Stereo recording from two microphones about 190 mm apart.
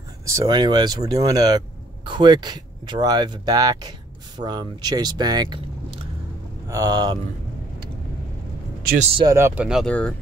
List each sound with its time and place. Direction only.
0.3 s speech: 20° right (ahead or behind)
9.1 s speech: 20° right (ahead or behind)
9.7 s speech: centre (ahead or behind)